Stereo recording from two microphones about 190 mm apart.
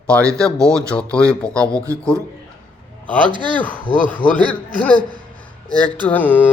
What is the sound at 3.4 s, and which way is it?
Mantra, 5° left (ahead or behind).